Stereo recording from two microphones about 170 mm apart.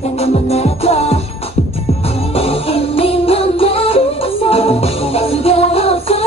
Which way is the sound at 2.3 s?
35° left (ahead or behind).